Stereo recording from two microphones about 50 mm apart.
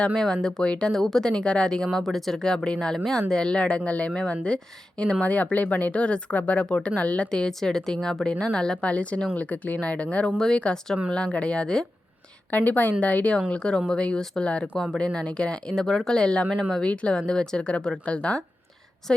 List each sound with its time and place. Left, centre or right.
0.0 s speech: centre
0.9 s a woman's voice: centre
1.3 s a woman's voice: left
7.3 s a woman's voice: centre
10.3 s a woman's voice: centre
11.3 s speech: left
12.5 s speech: left
13.5 s speech: centre